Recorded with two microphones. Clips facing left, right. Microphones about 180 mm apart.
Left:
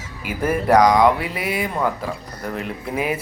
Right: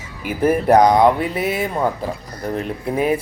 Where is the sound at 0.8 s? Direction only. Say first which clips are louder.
Right 2 dB; 30° right (ahead or behind).